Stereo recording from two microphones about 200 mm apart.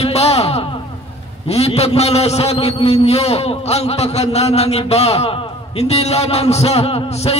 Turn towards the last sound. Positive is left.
turn(degrees=30)  # may be behind; listen again after turning